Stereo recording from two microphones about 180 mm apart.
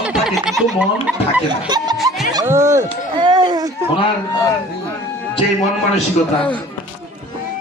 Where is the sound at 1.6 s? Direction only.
20° right (ahead or behind).